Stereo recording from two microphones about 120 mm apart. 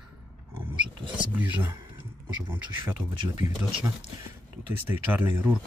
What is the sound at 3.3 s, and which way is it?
Speech, 25° right (ahead or behind).